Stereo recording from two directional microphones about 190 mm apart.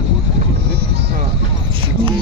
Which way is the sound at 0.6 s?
65° right (ahead or behind).